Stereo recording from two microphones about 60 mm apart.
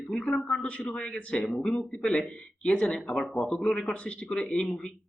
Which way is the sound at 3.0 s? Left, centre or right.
Centre.